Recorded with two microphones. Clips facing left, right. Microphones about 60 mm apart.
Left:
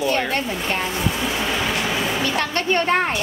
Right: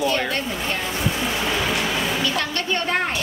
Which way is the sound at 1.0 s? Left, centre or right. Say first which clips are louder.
Left 1 dB; centre.